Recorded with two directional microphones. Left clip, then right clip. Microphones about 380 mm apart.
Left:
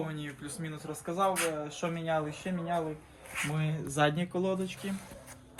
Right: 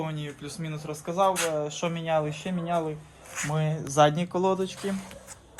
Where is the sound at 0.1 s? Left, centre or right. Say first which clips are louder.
Right 4 dB; right.